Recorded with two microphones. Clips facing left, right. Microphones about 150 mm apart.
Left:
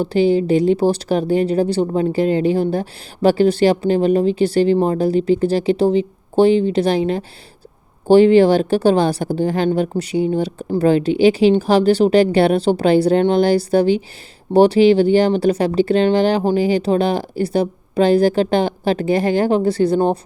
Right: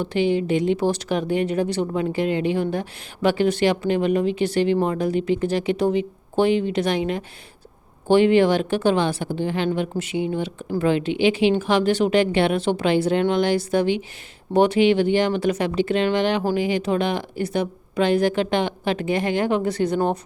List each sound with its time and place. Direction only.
0.0 s speech: 35° left (ahead or behind)